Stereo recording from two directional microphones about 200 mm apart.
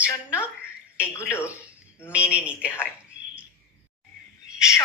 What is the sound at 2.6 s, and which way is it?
Speech, 10° left (ahead or behind).